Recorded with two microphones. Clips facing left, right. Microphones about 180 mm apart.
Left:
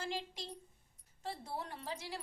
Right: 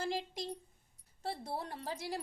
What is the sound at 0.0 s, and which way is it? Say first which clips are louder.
A child's voice: right 4 dB; 40° right (ahead or behind).